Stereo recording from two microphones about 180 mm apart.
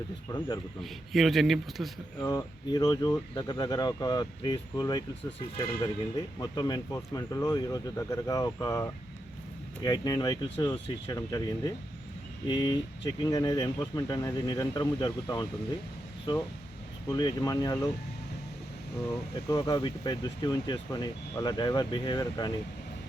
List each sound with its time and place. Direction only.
0.3 s speech: 20° left (ahead or behind)
0.8 s speech: centre (ahead or behind)
2.2 s speech: 20° left (ahead or behind)
6.4 s speech: 25° left (ahead or behind)
19.5 s speech: 20° left (ahead or behind)